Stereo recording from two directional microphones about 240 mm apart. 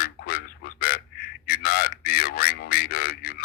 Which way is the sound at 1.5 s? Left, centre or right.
Left.